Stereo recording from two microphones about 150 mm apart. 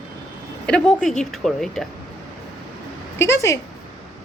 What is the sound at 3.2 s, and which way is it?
Speech, 20° left (ahead or behind).